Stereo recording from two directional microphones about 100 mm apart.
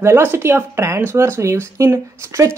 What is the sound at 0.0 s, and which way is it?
A woman's voice, 25° right (ahead or behind).